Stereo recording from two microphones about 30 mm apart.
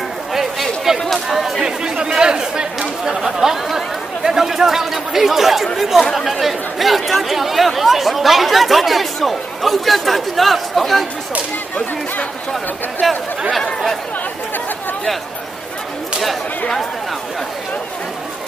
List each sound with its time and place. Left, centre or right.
0.3 s a sound: centre
2.1 s chatter: right
3.2 s chatter: centre
3.7 s speech: centre
13.0 s speech: centre